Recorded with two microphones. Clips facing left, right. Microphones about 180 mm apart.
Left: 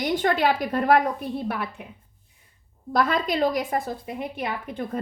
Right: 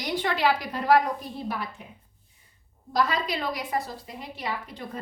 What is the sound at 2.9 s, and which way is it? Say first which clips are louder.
A woman's voice: left 3 dB; 50° left (ahead or behind).